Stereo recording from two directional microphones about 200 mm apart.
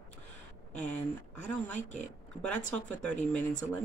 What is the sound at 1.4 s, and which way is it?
Speech, 5° left (ahead or behind).